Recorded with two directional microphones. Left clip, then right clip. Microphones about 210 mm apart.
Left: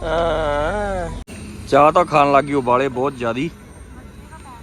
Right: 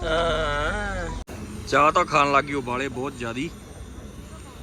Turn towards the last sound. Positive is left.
turn(degrees=0)  # may be behind; listen again after turning